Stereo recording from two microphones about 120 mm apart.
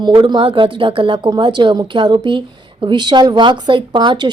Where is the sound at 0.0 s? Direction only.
40° right (ahead or behind).